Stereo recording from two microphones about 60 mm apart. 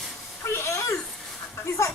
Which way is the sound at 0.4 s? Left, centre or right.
Left.